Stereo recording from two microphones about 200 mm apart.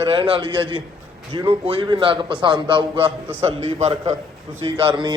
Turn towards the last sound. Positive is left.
turn(degrees=-25)  # may be behind; listen again after turning